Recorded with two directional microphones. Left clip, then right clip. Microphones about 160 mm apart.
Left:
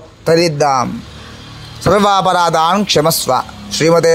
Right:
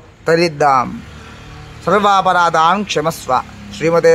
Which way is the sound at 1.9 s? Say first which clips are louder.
Left 1 dB; 30° left (ahead or behind).